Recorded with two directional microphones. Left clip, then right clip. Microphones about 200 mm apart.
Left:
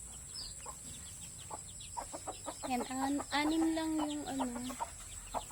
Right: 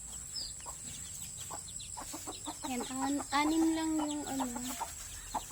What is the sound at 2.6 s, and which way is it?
Speech, 10° left (ahead or behind).